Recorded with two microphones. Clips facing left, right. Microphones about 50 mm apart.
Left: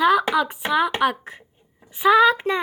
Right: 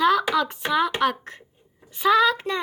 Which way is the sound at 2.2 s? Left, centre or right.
Left.